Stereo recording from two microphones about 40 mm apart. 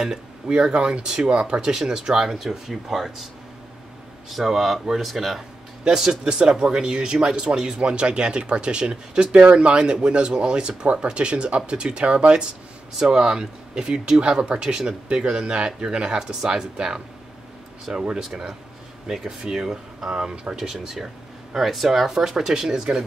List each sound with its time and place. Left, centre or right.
0.5 s speech: right; by 3.3 s centre
4.3 s speech: centre; by 12.4 s right
13.1 s speech: centre
18.1 s speech: centre